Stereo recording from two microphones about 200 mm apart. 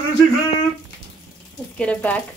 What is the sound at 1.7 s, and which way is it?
Speech, 5° left (ahead or behind).